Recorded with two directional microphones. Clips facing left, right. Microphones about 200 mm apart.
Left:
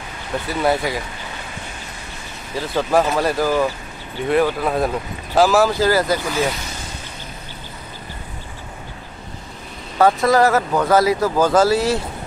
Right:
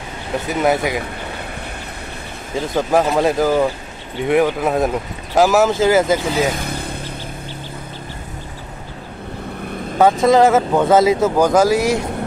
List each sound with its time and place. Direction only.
0.5 s speech: 20° right (ahead or behind)
2.5 s speech: 15° right (ahead or behind)
6.5 s vehicle: 55° right (ahead or behind)
10.2 s speech: 20° right (ahead or behind)